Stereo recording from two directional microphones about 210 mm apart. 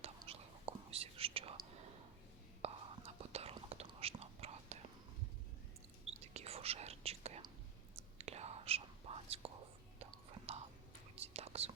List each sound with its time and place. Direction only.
0.2 s whispering: 30° right (ahead or behind)
2.6 s whispering: 30° right (ahead or behind)
6.1 s whispering: 30° right (ahead or behind)